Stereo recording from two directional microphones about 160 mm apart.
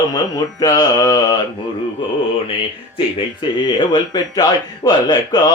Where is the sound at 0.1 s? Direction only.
25° left (ahead or behind).